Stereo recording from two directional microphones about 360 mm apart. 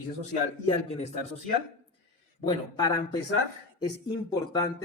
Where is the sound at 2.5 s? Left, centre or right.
Centre.